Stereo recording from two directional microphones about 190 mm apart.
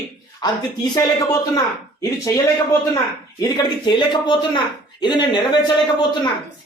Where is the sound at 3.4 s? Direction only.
20° left (ahead or behind).